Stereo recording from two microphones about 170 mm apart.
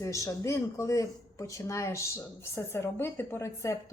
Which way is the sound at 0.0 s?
20° left (ahead or behind).